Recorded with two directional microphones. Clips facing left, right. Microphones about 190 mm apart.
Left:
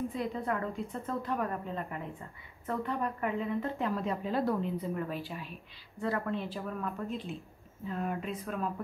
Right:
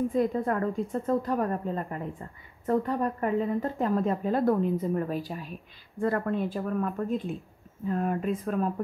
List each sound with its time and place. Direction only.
0.1 s a woman's voice: 45° right (ahead or behind)